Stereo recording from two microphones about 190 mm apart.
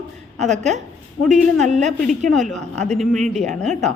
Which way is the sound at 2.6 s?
35° right (ahead or behind).